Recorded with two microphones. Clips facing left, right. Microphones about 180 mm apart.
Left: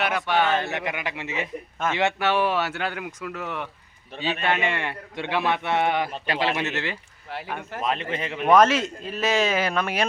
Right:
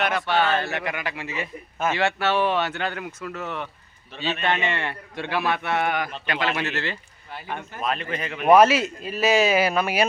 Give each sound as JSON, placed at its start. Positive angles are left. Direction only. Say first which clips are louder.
{"t": 0.0, "sound": "a man's voice", "louder": "even", "side_deg": 10}
{"t": 6.6, "sound": "a man's voice", "louder": "even", "side_deg": 20}
{"t": 8.4, "sound": "a man's voice", "louder": "right 2 dB", "side_deg": -10}